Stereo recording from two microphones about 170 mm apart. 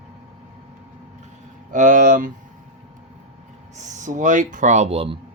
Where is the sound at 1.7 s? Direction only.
50° right (ahead or behind).